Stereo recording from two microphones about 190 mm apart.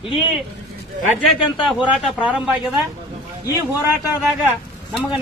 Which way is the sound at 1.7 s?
5° right (ahead or behind).